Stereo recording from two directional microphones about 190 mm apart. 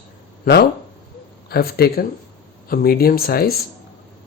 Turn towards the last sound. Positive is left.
turn(degrees=55)  # may be behind; listen again after turning